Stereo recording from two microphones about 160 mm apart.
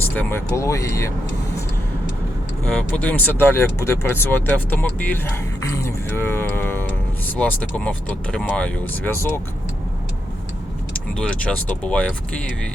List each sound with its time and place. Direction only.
0.1 s speech: 10° left (ahead or behind)
2.6 s speech: 10° left (ahead or behind)
10.9 s speech: 5° left (ahead or behind)